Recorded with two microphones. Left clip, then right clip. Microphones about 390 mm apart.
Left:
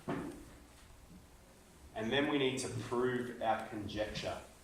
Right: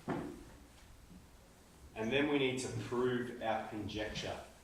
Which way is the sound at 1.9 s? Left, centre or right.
Centre.